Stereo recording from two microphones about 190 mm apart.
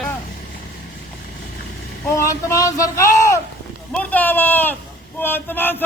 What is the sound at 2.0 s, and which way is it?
A man's voice, 15° left (ahead or behind).